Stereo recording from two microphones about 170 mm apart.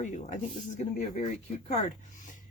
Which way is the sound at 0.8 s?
45° left (ahead or behind).